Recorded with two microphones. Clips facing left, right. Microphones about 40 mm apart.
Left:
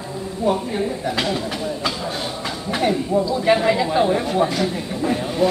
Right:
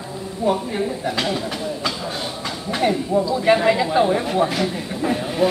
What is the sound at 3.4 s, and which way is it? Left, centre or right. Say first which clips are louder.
Speech: right 2 dB; centre.